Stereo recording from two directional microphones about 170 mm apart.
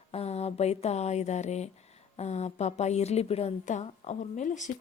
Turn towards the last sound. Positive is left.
turn(degrees=45)  # may be behind; listen again after turning